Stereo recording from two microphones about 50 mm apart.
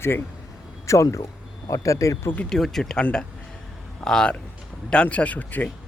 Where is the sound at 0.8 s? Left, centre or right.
Left.